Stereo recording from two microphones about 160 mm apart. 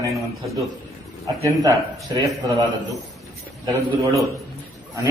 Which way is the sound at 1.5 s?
20° right (ahead or behind).